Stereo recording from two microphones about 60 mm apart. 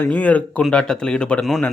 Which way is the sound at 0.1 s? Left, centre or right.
Left.